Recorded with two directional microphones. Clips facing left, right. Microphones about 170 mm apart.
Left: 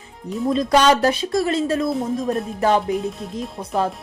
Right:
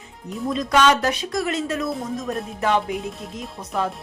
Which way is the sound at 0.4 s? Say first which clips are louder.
Left 3 dB; 30° left (ahead or behind).